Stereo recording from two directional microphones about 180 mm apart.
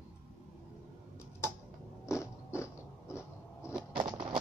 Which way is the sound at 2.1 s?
15° left (ahead or behind).